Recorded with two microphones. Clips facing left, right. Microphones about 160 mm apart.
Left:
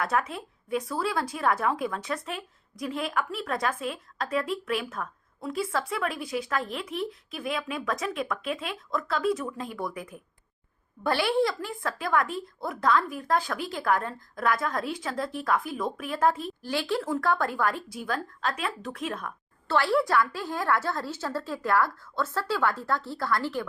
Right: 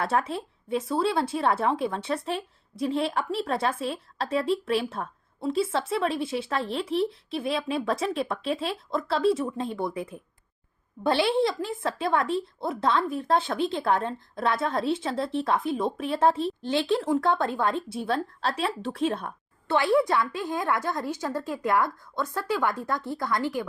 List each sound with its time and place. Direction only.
0.0 s speech: 30° right (ahead or behind)
19.6 s a woman's voice: 20° right (ahead or behind)